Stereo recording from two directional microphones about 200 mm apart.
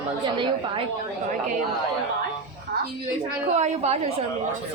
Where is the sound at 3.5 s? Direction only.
35° right (ahead or behind).